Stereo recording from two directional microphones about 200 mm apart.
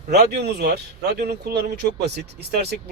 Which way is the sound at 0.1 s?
55° right (ahead or behind).